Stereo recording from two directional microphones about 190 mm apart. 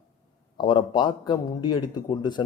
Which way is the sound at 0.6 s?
25° left (ahead or behind).